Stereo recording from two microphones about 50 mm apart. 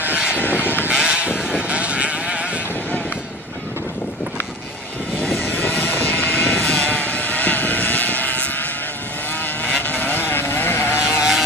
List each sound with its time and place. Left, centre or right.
0.9 s sheep: centre
1.7 s sheep: right
5.3 s sheep: left
9.7 s vehicle: left
11.1 s vehicle: centre